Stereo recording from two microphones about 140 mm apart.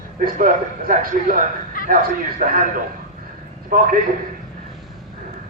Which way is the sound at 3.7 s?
90° right.